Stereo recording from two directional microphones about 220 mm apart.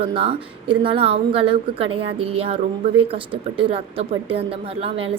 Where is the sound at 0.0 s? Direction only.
25° right (ahead or behind).